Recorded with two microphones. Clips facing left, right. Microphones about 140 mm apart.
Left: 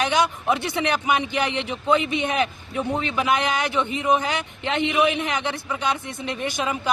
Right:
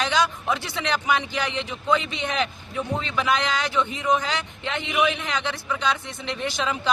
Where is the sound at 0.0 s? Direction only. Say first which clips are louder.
Left 2 dB; 20° left (ahead or behind).